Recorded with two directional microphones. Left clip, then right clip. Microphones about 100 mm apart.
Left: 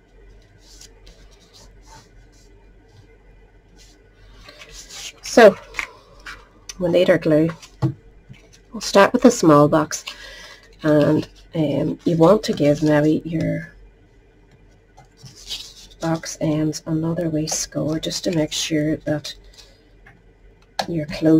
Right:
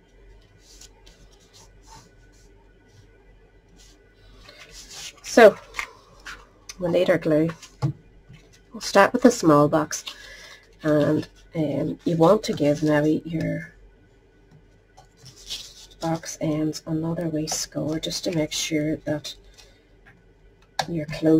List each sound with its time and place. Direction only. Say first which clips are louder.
0.7 s scratch: left 3 dB; 10° left (ahead or behind)
4.5 s a sound: left 4 dB; 10° left (ahead or behind)
6.3 s a sound: left 2 dB; 10° right (ahead or behind)
6.6 s speech: left 5 dB; 10° left (ahead or behind)
8.7 s a woman's voice: left 3 dB; 15° left (ahead or behind)
9.5 s speech: left 5 dB; centre (ahead or behind)
9.8 s speech: left 3 dB; 15° left (ahead or behind)
15.4 s writing: left 3 dB; 10° left (ahead or behind)
16.8 s speech: left 4 dB; centre (ahead or behind)
20.9 s speech: left 7 dB; 15° left (ahead or behind)